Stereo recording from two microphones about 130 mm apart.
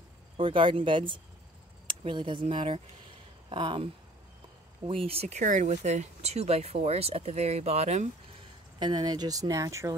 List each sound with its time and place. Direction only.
0.4 s speech: 40° right (ahead or behind)
5.4 s speech: 75° right (ahead or behind); by 8.1 s 60° right (ahead or behind)
8.7 s speech: 35° right (ahead or behind)